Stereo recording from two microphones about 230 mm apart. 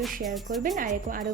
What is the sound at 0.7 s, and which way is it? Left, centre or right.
Speech, right.